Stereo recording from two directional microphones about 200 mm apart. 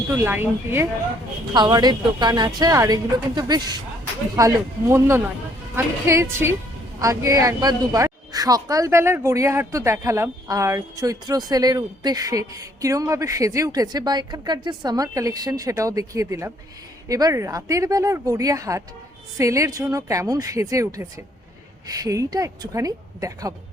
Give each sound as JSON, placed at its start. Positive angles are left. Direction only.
{"t": 0.2, "sound": "a woman's voice", "side_deg": -10}